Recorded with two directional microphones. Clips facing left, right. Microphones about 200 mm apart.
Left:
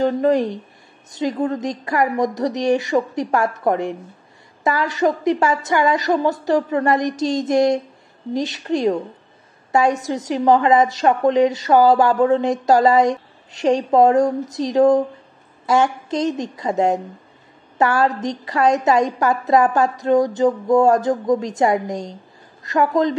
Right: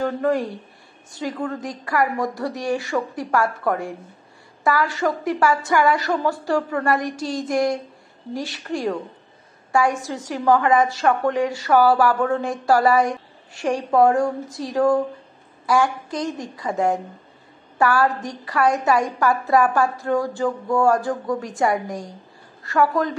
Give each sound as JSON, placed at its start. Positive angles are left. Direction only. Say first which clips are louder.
{"t": 0.0, "sound": "a woman's voice", "louder": "left 5 dB", "side_deg": 20}